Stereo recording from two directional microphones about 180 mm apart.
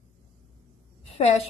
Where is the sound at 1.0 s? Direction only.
35° left (ahead or behind).